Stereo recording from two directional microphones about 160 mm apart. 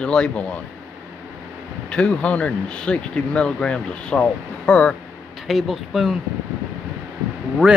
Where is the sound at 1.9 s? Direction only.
5° left (ahead or behind).